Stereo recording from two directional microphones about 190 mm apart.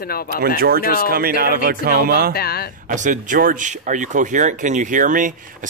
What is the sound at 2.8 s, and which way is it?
Speech, 40° right (ahead or behind).